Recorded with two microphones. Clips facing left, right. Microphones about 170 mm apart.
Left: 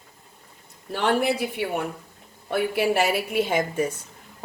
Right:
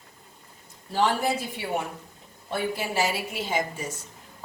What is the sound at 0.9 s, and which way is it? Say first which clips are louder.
A woman's voice: left 2 dB; 65° left (ahead or behind).